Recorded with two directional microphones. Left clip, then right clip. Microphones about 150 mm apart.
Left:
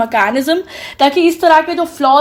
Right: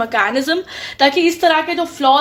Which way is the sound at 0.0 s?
45° left (ahead or behind).